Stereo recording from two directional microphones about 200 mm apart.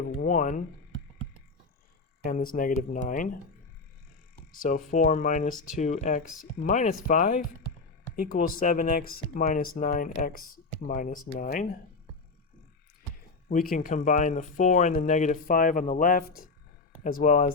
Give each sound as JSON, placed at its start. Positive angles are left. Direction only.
{"t": 0.2, "sound": "speech", "side_deg": 40}
{"t": 2.2, "sound": "speech", "side_deg": 45}
{"t": 4.5, "sound": "speech", "side_deg": 40}
{"t": 13.5, "sound": "speech", "side_deg": 40}